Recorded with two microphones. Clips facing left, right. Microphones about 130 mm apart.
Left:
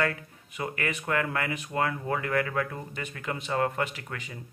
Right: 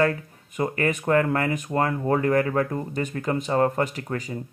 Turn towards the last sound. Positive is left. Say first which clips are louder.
# right 10 dB
turn(degrees=-40)  # may be behind; listen again after turning